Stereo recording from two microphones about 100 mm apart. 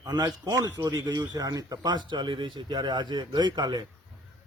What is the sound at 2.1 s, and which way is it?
A man's voice, 55° right (ahead or behind).